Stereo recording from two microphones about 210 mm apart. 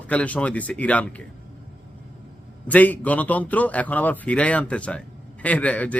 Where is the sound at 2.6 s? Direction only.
5° left (ahead or behind).